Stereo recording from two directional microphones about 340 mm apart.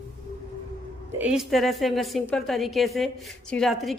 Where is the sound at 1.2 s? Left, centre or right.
Centre.